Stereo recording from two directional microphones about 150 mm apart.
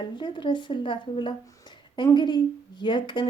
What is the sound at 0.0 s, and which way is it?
Speech, 30° left (ahead or behind).